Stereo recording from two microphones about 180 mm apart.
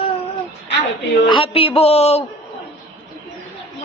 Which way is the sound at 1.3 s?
30° left (ahead or behind).